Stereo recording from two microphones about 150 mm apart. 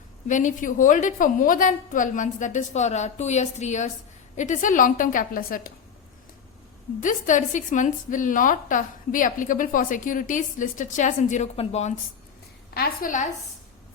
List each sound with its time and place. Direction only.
0.3 s a woman's voice: 55° left (ahead or behind)
7.0 s a woman's voice: 55° left (ahead or behind)
12.7 s a woman's voice: 80° left